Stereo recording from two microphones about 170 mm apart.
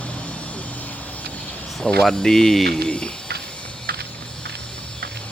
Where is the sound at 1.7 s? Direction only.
5° left (ahead or behind).